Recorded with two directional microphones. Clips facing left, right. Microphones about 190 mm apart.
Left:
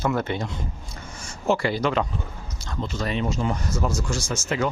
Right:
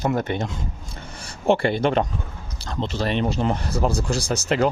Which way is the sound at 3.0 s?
65° right (ahead or behind).